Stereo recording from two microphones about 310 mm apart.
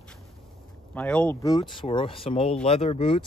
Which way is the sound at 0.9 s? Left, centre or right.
Centre.